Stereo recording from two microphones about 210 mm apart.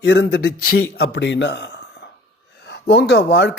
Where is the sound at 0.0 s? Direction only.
55° left (ahead or behind).